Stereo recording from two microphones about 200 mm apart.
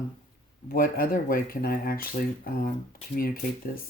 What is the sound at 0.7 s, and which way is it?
Speech, 45° left (ahead or behind).